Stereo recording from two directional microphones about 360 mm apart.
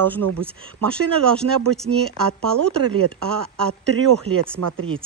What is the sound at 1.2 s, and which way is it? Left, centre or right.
Speech, centre.